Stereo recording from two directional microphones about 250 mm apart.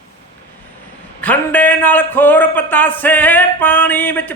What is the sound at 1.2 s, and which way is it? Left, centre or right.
A man's voice, centre.